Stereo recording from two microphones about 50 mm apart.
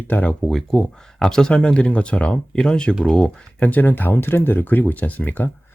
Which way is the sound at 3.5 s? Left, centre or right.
Left.